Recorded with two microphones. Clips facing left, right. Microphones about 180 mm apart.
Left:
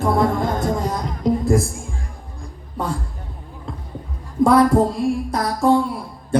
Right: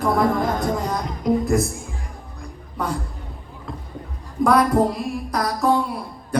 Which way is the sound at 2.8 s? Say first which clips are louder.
Left 1 dB; 25° left (ahead or behind).